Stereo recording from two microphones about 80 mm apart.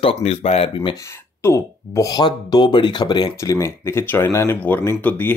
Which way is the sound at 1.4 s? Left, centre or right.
Left.